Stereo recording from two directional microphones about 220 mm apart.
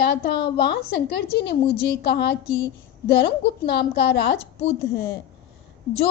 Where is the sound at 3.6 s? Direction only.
50° left (ahead or behind).